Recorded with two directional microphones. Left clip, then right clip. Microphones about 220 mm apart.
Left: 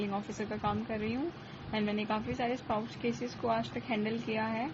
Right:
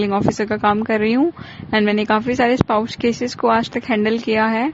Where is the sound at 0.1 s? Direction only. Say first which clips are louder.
Right 19 dB; 50° right (ahead or behind).